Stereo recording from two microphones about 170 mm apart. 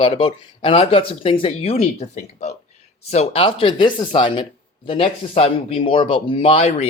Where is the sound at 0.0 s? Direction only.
30° left (ahead or behind).